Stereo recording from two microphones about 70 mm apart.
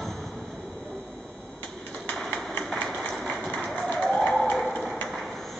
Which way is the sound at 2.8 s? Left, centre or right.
Centre.